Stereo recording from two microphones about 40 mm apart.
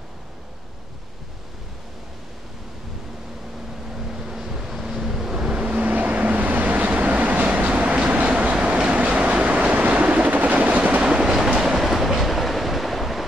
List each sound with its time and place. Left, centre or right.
3.9 s vehicle: centre
5.7 s vehicle: right
10.8 s train: right; by 13.2 s centre